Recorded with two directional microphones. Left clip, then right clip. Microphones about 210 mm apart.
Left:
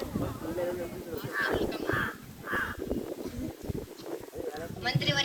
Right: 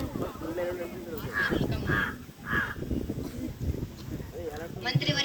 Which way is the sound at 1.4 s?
20° right (ahead or behind).